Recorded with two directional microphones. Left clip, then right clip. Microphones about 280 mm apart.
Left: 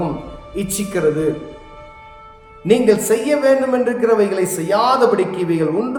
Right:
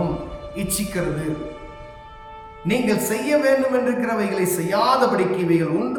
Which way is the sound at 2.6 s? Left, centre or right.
Centre.